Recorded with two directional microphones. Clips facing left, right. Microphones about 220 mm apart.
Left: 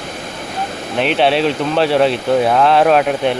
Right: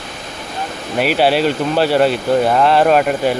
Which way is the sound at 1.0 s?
5° right (ahead or behind).